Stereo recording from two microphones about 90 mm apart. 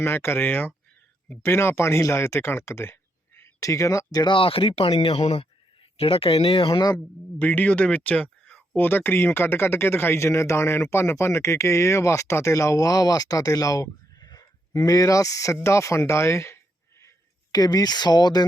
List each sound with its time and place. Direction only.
0.0 s speech: 25° left (ahead or behind); by 4.3 s 40° left (ahead or behind)
4.3 s speech: 85° left
7.3 s speech: 20° left (ahead or behind)
17.5 s speech: 45° left (ahead or behind)